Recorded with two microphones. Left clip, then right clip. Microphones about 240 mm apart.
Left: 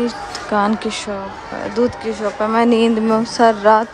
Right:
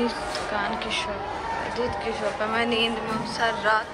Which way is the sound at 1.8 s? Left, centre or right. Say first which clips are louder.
Left 13 dB; left.